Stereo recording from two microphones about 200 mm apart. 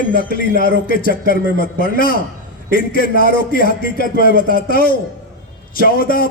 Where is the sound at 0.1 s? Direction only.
45° left (ahead or behind).